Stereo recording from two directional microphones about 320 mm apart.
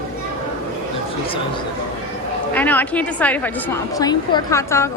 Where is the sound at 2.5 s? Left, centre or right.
Centre.